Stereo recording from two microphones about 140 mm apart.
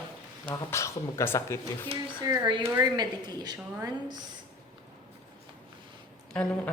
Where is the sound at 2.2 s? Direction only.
25° right (ahead or behind).